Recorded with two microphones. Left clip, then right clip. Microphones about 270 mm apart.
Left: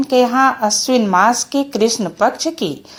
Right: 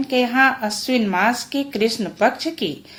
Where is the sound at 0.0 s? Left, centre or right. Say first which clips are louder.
Left 4 dB; left.